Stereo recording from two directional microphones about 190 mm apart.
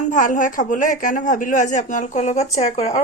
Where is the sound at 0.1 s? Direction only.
40° left (ahead or behind).